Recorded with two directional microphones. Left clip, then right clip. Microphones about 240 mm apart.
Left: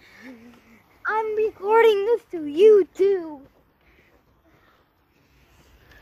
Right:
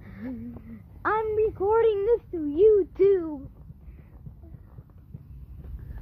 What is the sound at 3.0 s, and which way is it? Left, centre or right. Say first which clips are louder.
Speech: even; centre.